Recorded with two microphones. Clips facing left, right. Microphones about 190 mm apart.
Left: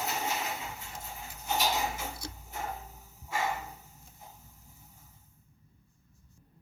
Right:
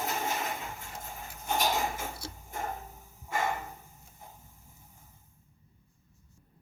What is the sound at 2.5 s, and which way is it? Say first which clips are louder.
Tick-tock: right 2 dB; 50° right (ahead or behind).